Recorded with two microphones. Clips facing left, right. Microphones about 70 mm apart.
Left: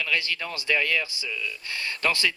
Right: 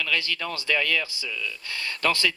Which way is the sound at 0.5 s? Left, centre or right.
Left.